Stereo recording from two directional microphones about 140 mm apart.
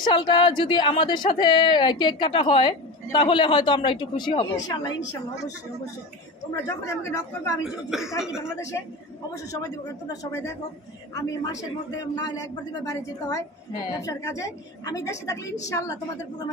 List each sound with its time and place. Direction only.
0.0 s speech: 35° left (ahead or behind)
6.6 s a woman's voice: 20° left (ahead or behind)
7.6 s speech: 5° right (ahead or behind)
9.5 s a woman's voice: 25° left (ahead or behind)
13.8 s a woman's voice: 25° left (ahead or behind)